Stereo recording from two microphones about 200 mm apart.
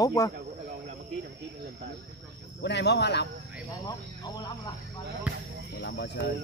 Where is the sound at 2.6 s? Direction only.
60° left (ahead or behind).